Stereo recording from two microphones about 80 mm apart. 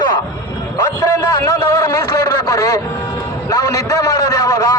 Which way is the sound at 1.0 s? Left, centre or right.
Left.